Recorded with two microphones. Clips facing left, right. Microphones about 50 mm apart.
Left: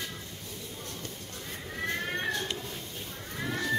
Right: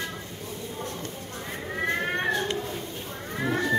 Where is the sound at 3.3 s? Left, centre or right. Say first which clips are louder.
Right 6 dB; right.